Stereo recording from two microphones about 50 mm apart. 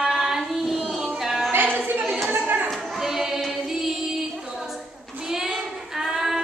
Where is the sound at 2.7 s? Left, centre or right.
Centre.